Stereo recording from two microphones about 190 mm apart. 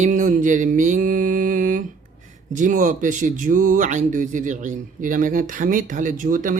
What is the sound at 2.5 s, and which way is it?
Speech, 45° right (ahead or behind).